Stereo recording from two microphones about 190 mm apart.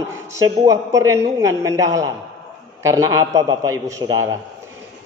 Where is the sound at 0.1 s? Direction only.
15° right (ahead or behind).